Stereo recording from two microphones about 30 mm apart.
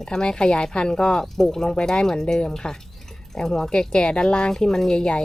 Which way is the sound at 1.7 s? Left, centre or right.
Left.